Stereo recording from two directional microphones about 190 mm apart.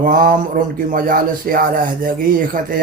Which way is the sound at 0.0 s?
45° right (ahead or behind).